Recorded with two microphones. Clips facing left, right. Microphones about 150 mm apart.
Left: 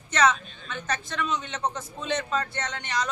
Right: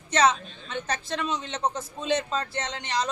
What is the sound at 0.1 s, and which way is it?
A woman's voice, 30° right (ahead or behind).